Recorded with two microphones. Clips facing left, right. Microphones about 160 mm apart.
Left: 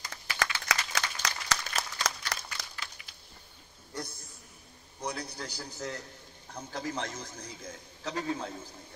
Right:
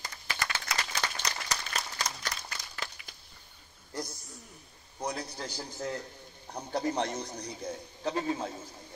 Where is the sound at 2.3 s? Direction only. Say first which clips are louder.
Left 4 dB; 90° left.